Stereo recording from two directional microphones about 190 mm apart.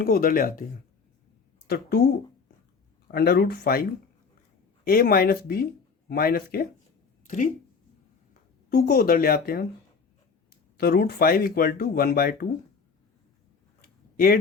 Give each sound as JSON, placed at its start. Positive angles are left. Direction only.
{"t": 0.0, "sound": "speech", "side_deg": 50}
{"t": 1.6, "sound": "speech", "side_deg": 55}
{"t": 3.1, "sound": "speech", "side_deg": 55}
{"t": 4.9, "sound": "speech", "side_deg": 50}
{"t": 10.8, "sound": "speech", "side_deg": 55}
{"t": 13.8, "sound": "a sound", "side_deg": 50}